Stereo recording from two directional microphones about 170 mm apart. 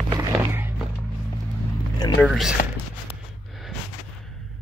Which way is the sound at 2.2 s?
Centre (ahead or behind).